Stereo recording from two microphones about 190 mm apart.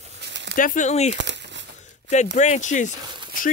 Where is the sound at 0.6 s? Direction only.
45° left (ahead or behind).